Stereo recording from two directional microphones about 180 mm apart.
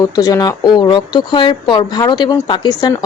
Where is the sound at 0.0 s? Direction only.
20° left (ahead or behind).